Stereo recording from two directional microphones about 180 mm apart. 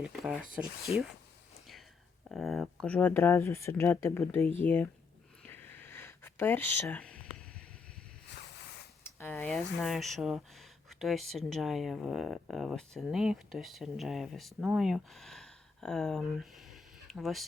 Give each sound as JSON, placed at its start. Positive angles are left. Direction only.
{"t": 0.3, "sound": "speech", "side_deg": -5}
{"t": 2.3, "sound": "speech", "side_deg": 0}
{"t": 5.4, "sound": "a sound", "side_deg": 10}
{"t": 9.2, "sound": "speech", "side_deg": 5}